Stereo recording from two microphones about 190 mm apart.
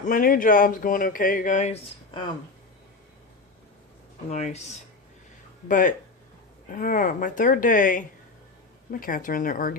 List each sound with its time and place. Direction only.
0.0 s speech: 45° left (ahead or behind)
4.3 s speech: 35° left (ahead or behind)
5.6 s speech: 45° left (ahead or behind)